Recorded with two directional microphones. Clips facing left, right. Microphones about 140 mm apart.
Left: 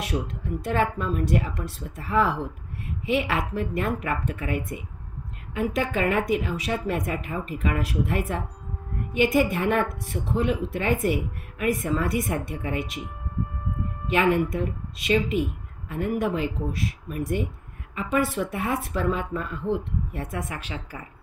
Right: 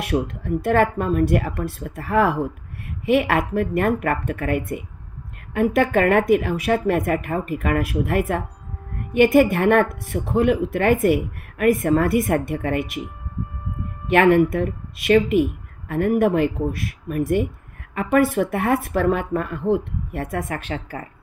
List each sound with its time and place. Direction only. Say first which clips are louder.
0.0 s speech: right 6 dB; 60° right (ahead or behind)
14.0 s speech: right 7 dB; 60° right (ahead or behind)